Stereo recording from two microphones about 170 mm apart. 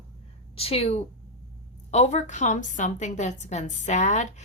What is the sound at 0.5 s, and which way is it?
A woman's voice, 35° left (ahead or behind).